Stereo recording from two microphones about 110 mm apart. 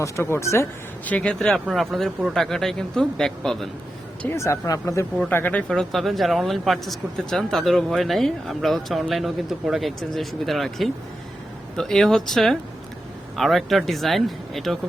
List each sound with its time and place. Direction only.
0.0 s speech: 25° left (ahead or behind)
1.0 s speech: 15° left (ahead or behind)
4.3 s speech: 25° left (ahead or behind)
5.3 s speech: 20° left (ahead or behind)
5.6 s speech: 5° left (ahead or behind)